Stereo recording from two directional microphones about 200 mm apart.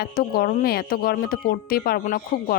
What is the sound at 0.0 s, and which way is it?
A woman's voice, 50° left (ahead or behind).